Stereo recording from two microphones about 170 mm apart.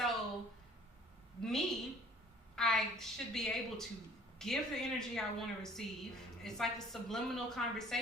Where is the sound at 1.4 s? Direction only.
5° left (ahead or behind).